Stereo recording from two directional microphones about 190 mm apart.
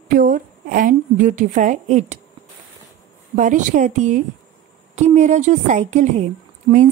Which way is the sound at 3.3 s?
40° right (ahead or behind).